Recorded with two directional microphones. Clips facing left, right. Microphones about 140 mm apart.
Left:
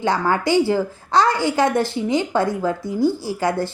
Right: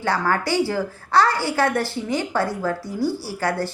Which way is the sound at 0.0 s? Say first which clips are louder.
Left 3 dB; 15° left (ahead or behind).